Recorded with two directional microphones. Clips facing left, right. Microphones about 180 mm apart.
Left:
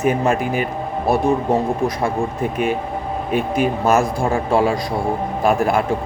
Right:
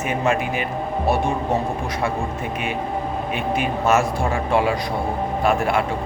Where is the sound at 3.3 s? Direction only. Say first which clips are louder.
Left 6 dB; 35° left (ahead or behind).